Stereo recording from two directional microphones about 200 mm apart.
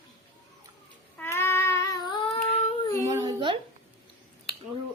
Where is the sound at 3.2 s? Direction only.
25° right (ahead or behind).